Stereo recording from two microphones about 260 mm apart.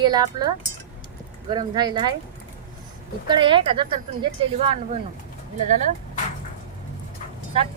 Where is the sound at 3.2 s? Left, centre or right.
Centre.